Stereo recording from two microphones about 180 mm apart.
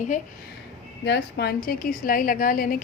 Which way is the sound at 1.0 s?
70° left (ahead or behind).